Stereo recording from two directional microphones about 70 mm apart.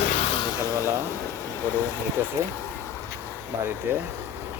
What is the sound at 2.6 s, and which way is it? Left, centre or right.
Duck, left.